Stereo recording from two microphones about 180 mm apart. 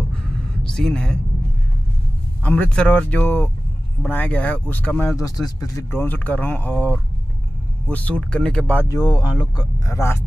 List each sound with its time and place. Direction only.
0.7 s speech: 5° left (ahead or behind)
2.4 s speech: 10° left (ahead or behind)
8.9 s speech: 25° left (ahead or behind)